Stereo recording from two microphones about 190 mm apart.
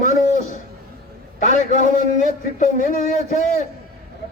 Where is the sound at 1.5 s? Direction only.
40° left (ahead or behind).